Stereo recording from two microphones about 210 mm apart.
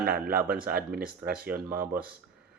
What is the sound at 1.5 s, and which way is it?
Speech, 45° right (ahead or behind).